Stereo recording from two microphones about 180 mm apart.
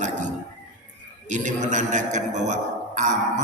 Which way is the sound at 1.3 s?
45° right (ahead or behind).